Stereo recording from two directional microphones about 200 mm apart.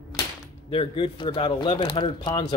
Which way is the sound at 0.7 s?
25° left (ahead or behind).